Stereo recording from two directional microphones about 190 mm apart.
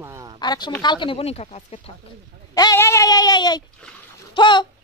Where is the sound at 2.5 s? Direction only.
15° left (ahead or behind).